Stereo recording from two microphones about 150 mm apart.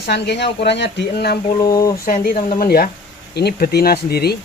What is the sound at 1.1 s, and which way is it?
Speech, 90° left.